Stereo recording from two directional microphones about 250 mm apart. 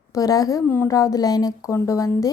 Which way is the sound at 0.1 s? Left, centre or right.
Centre.